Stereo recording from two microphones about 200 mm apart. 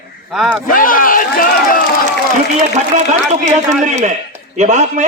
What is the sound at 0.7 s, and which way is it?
A man's voice, 45° left (ahead or behind).